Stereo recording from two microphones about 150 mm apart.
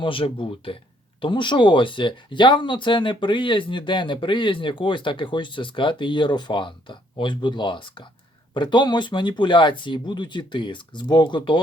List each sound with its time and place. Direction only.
0.0 s speech: 35° left (ahead or behind)